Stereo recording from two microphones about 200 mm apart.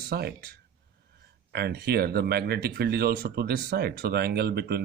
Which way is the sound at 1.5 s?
55° right (ahead or behind).